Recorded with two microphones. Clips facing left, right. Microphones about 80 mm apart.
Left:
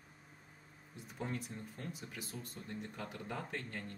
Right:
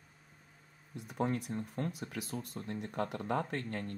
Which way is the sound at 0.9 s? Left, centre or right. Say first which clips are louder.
Right 8 dB; right.